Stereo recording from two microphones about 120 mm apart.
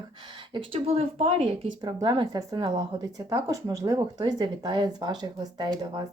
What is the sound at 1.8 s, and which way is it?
Speech, 40° right (ahead or behind).